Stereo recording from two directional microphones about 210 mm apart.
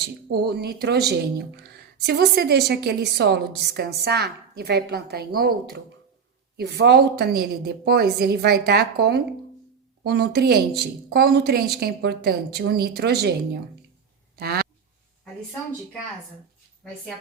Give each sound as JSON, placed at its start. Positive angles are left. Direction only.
{"t": 0.0, "sound": "a woman's voice", "side_deg": -50}